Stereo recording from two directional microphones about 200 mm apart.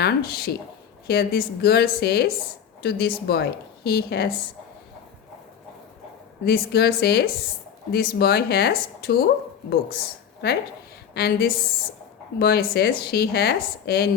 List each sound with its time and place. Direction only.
0.0 s speech: 50° left (ahead or behind)
6.4 s speech: 50° left (ahead or behind)
11.1 s a woman's voice: 50° left (ahead or behind)